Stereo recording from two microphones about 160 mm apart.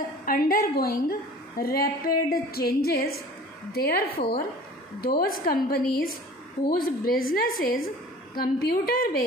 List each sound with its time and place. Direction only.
0.2 s a woman's voice: 65° left (ahead or behind)